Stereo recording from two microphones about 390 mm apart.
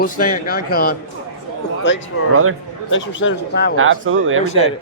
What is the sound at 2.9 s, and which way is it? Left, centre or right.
Speech, left.